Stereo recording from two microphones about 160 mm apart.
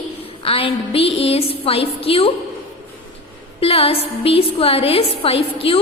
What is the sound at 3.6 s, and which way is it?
A woman's voice, 35° left (ahead or behind).